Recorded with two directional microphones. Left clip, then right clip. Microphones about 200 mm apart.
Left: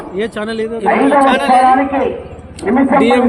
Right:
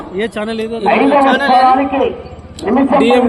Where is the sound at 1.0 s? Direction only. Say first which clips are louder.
Left 1 dB; 25° right (ahead or behind).